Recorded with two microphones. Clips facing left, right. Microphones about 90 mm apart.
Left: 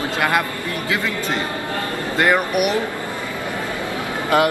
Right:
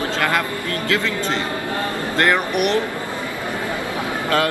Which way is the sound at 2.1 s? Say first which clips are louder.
Left 1 dB; 10° left (ahead or behind).